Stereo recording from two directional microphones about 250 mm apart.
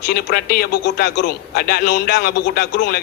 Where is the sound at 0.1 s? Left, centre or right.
Left.